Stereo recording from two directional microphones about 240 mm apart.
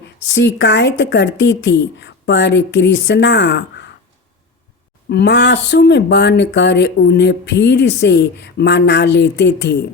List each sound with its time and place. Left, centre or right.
0.3 s speech: left
5.0 s speech: left